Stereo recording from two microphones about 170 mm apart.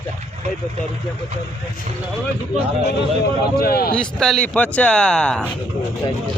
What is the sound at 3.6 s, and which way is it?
Speech, 65° left (ahead or behind).